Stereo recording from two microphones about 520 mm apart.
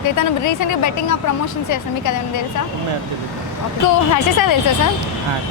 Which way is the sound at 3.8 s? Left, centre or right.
Left.